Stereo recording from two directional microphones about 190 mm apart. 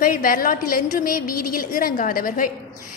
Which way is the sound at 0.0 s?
45° left (ahead or behind).